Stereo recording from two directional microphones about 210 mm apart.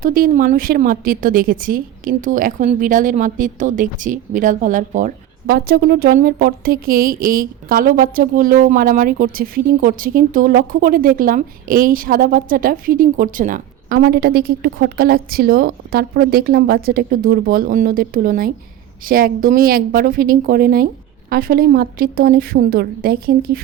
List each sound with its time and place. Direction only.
0.0 s a woman's voice: 40° right (ahead or behind)